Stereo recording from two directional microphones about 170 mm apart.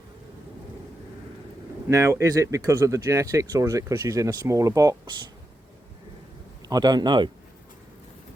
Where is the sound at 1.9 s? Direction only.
15° right (ahead or behind).